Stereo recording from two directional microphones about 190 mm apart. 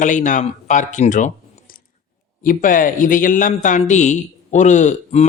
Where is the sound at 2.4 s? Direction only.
45° left (ahead or behind).